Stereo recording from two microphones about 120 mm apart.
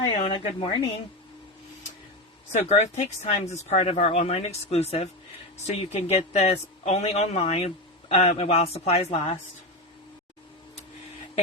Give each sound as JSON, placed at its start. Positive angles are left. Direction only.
{"t": 0.1, "sound": "speech", "side_deg": 40}
{"t": 2.5, "sound": "speech", "side_deg": 75}